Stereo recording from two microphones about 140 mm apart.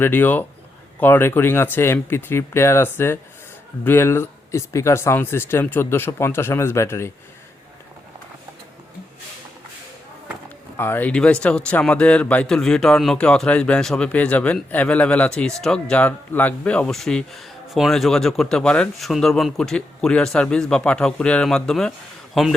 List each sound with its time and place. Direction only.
0.0 s speech: 15° left (ahead or behind)
10.8 s speech: 15° left (ahead or behind); by 22.5 s centre (ahead or behind)